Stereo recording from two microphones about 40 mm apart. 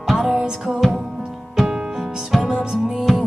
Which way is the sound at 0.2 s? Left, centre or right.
Centre.